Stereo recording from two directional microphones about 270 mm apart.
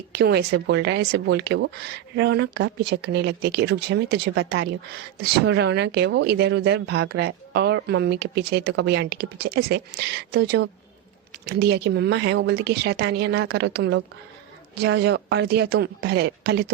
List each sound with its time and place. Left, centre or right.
0.1 s speech: right